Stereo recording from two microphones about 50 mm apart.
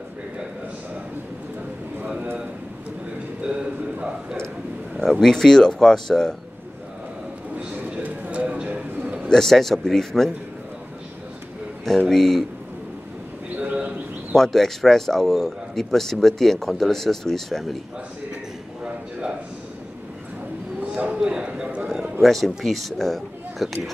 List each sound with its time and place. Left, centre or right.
3.4 s a sound: right
5.2 s a man's voice: centre
7.5 s a sound: right
8.6 s bird: right
9.3 s a man's voice: centre
12.1 s speech: centre
13.6 s bird: right
14.3 s a man's voice: centre
21.0 s a sound: right
22.2 s speech: centre